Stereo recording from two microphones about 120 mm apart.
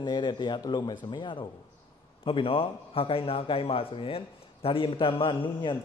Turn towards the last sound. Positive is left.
turn(degrees=45)  # may be behind; listen again after turning